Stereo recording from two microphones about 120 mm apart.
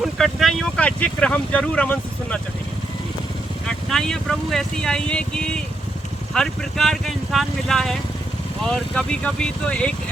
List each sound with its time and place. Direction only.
0.0 s speech: centre (ahead or behind)
3.7 s speech: 5° left (ahead or behind)